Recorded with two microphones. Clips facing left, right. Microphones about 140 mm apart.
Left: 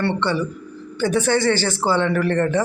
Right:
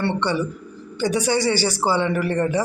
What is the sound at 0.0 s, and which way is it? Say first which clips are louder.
A woman's voice: left 1 dB; 15° right (ahead or behind).